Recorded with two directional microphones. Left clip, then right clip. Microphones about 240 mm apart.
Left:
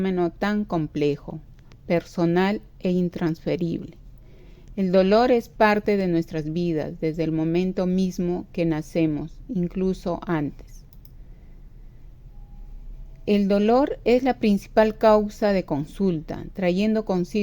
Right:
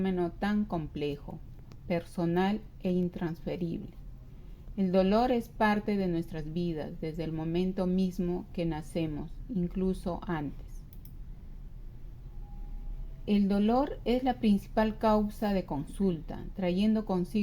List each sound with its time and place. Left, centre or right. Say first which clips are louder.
0.0 s a woman's voice: left 8 dB; left
13.2 s a woman's voice: left 9 dB; left